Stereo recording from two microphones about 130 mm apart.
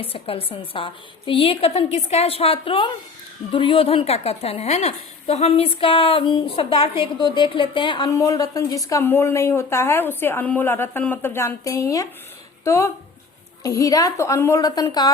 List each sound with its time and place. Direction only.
0.0 s a woman's voice: 45° left (ahead or behind)
8.1 s a woman's voice: 25° left (ahead or behind)